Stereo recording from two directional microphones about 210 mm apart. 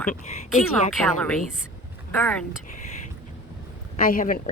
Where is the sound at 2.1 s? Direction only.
10° left (ahead or behind).